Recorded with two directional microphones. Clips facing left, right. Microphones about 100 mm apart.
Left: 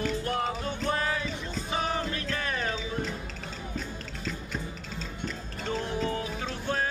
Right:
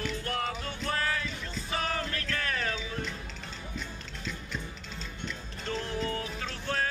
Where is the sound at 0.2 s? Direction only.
20° left (ahead or behind).